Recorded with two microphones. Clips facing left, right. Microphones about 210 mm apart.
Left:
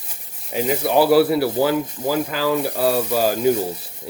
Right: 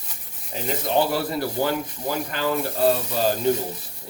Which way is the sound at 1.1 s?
5° left (ahead or behind).